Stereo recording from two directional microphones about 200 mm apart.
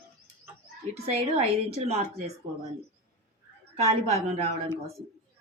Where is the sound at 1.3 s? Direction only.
30° right (ahead or behind).